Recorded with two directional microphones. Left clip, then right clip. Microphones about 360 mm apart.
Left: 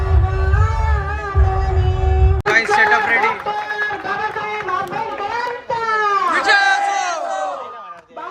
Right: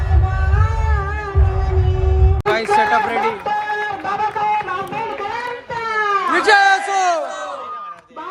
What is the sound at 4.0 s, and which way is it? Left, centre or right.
Music, right.